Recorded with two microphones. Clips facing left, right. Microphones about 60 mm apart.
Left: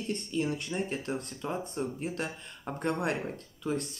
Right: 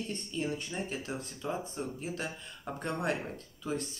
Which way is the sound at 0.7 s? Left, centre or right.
Left.